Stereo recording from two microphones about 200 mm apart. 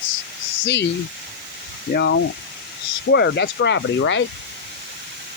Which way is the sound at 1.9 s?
60° left (ahead or behind).